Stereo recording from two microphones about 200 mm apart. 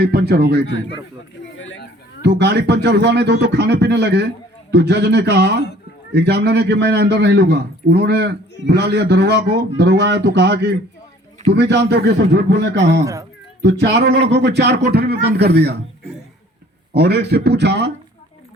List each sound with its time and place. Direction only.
0.0 s speech: 55° right (ahead or behind)
1.5 s a sound: 65° left (ahead or behind)
2.2 s a man's voice: 55° right (ahead or behind)
16.9 s a man's voice: 55° right (ahead or behind)